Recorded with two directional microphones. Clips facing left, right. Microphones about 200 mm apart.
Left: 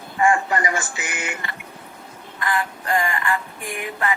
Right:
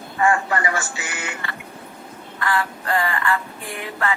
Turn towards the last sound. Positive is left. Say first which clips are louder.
# even
turn(degrees=15)  # may be behind; listen again after turning